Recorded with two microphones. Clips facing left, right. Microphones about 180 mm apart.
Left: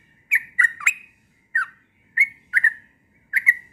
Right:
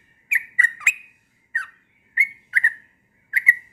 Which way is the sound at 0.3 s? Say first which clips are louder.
Left 1 dB; 25° right (ahead or behind).